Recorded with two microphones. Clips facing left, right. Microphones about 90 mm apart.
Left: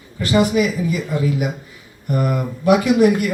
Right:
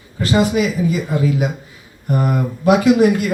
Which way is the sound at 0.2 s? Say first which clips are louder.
Even; 25° right (ahead or behind).